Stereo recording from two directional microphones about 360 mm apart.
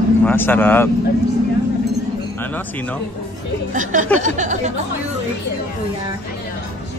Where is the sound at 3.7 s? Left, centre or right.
Right.